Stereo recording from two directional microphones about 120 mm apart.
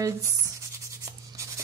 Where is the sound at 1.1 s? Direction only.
25° right (ahead or behind).